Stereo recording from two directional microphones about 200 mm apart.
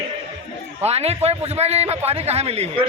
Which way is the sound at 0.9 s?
30° right (ahead or behind).